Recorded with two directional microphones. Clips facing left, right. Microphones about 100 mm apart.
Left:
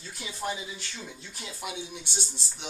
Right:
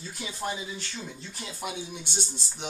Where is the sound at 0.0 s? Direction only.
5° right (ahead or behind).